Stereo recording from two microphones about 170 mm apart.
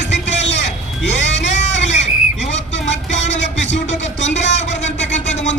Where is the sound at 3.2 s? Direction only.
90° left.